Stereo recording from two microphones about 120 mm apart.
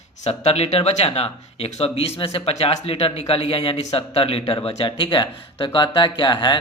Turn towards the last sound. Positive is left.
turn(degrees=40)  # may be behind; listen again after turning